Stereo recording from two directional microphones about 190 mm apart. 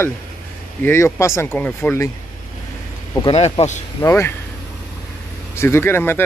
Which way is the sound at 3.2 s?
30° left (ahead or behind).